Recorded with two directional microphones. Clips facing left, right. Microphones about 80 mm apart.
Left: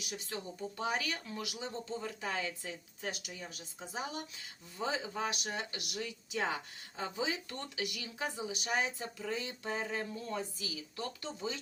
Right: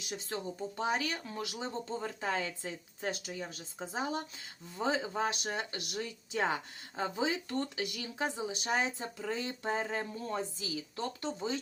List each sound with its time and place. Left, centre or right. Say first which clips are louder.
0.0 s speech: right 3 dB; right